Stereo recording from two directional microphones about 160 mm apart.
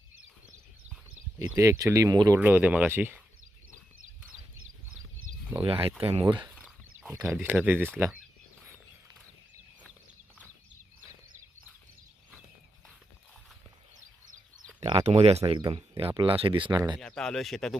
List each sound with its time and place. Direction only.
1.4 s speech: 20° right (ahead or behind)
2.4 s speech: 10° right (ahead or behind)
5.6 s speech: 35° right (ahead or behind)
6.6 s a sound: 5° right (ahead or behind)
7.4 s speech: 10° right (ahead or behind)
14.8 s speech: 35° right (ahead or behind)
17.0 s speech: 5° left (ahead or behind)